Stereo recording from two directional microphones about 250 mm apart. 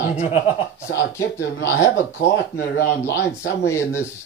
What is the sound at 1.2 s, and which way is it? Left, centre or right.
Speech, left.